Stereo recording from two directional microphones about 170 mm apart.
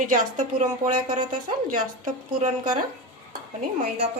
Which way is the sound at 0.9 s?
25° right (ahead or behind).